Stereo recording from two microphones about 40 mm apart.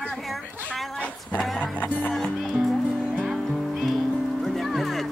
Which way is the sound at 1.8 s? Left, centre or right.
Left.